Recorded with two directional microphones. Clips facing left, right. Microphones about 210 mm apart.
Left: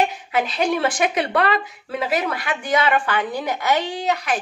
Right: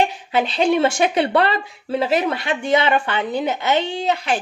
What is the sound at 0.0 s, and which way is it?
Speech, 30° right (ahead or behind).